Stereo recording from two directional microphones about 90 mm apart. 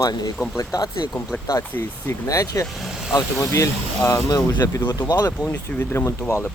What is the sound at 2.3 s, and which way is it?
Speech, 35° left (ahead or behind).